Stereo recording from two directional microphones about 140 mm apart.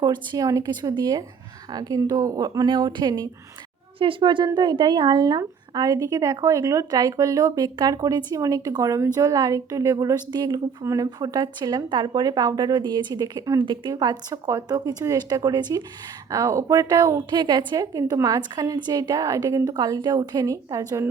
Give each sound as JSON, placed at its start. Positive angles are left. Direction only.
{"t": 0.0, "sound": "speech", "side_deg": -30}
{"t": 3.9, "sound": "speech", "side_deg": -40}